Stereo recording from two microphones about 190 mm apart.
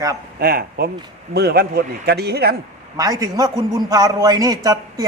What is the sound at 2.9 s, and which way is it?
A man's voice, 20° right (ahead or behind).